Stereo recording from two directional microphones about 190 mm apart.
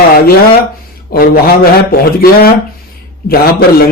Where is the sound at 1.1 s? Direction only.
55° left (ahead or behind).